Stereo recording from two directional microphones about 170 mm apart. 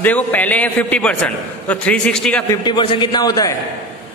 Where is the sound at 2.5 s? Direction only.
25° left (ahead or behind).